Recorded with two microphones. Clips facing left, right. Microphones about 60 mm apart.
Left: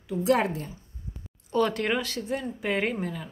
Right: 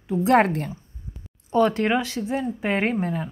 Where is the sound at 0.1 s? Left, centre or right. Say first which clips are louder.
Right 6 dB; right.